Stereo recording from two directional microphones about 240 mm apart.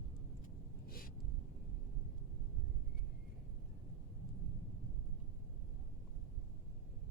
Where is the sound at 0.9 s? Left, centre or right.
Left.